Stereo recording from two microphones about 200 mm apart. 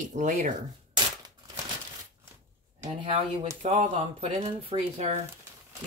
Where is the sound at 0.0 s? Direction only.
40° right (ahead or behind).